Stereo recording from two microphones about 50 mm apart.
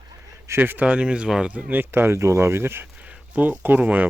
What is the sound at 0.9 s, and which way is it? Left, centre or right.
Speech, centre.